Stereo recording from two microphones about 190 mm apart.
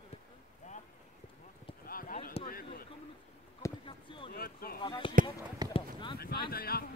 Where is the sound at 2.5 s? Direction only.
50° left (ahead or behind).